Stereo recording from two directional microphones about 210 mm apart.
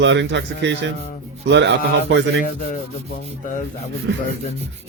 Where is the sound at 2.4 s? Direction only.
40° left (ahead or behind).